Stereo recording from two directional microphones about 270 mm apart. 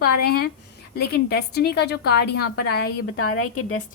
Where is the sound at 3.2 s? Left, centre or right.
Left.